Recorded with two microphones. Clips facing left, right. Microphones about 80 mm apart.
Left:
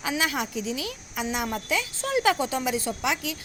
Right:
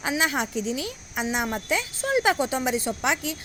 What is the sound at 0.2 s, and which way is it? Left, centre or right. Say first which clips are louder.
A woman's voice: right 2 dB; right.